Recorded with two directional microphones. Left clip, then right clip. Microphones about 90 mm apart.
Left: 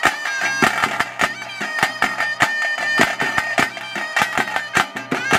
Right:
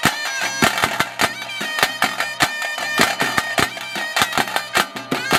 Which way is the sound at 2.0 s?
25° right (ahead or behind).